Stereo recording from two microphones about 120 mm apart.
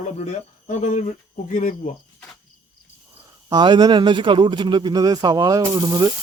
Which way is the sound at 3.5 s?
40° right (ahead or behind).